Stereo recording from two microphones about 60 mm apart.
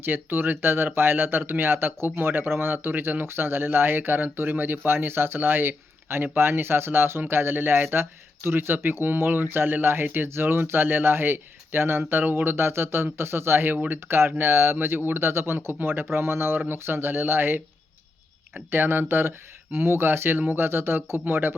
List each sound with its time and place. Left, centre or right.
0.0 s speech: right